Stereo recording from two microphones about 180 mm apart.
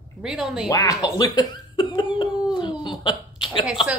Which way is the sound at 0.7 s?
20° left (ahead or behind).